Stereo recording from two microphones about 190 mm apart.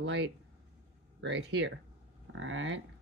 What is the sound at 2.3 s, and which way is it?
Speech, 90° right.